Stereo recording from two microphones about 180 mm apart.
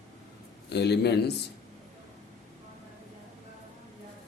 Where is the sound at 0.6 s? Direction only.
65° left (ahead or behind).